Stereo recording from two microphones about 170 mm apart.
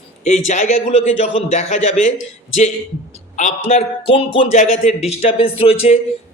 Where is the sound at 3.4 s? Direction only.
40° left (ahead or behind).